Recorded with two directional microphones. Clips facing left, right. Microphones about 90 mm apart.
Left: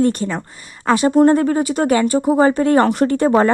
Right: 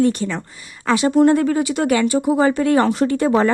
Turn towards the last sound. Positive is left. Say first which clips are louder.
# left 2 dB
turn(degrees=45)  # may be behind; listen again after turning